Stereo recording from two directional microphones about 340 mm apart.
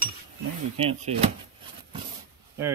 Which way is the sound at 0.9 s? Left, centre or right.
Centre.